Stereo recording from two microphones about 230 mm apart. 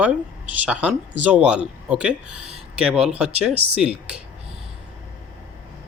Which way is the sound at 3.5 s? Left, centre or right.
Right.